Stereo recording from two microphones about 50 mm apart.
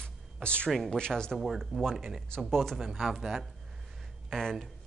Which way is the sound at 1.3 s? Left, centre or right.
Centre.